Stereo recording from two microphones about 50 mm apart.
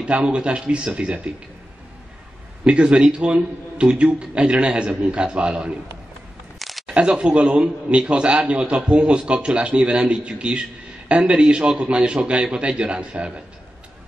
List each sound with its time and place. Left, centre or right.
0.0 s a man's voice: right
2.6 s a man's voice: right
6.9 s a man's voice: right